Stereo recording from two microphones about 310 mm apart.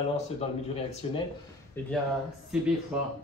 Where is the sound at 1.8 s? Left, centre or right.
Centre.